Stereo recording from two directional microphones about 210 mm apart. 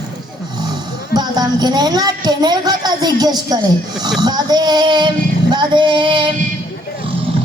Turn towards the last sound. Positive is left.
turn(degrees=-25)  # may be behind; listen again after turning